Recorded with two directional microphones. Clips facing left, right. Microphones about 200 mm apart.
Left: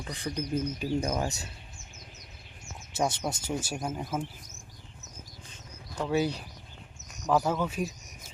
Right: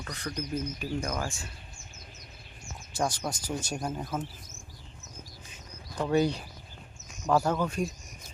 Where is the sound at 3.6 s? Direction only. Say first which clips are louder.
Even; 5° left (ahead or behind).